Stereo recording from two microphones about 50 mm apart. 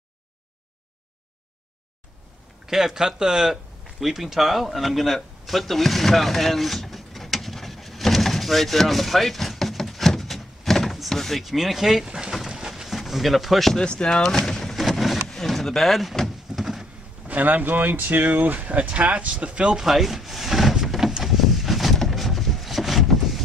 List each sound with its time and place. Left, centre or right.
2.6 s speech: centre
4.0 s a sound: centre
13.7 s speech: centre
14.9 s a sound: centre
15.2 s speech: centre
16.5 s a sound: centre
17.3 s speech: right
19.8 s speech: centre
20.9 s vehicle: centre